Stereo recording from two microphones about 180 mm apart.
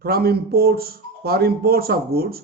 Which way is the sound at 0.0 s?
60° right (ahead or behind).